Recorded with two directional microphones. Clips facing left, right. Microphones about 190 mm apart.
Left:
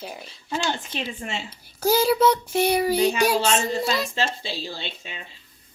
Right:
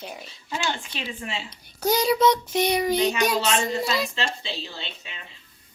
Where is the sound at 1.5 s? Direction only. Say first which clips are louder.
Left 2 dB; 5° left (ahead or behind).